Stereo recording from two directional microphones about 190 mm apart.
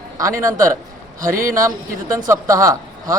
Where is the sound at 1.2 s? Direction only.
45° right (ahead or behind).